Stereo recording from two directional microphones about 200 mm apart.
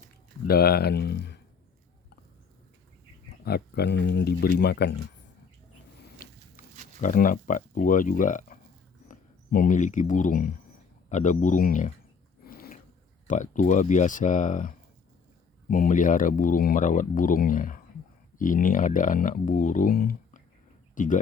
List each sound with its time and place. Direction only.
0.4 s speech: 50° left (ahead or behind)
3.4 s speech: 50° left (ahead or behind)
6.6 s a sound: 40° left (ahead or behind)
7.0 s speech: 40° left (ahead or behind)
12.5 s a sound: 45° left (ahead or behind)
13.2 s speech: 40° left (ahead or behind)